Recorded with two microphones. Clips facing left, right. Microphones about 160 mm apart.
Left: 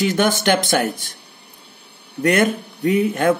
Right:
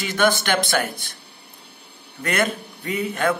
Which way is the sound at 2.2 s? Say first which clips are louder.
Left 6 dB; 50° left (ahead or behind).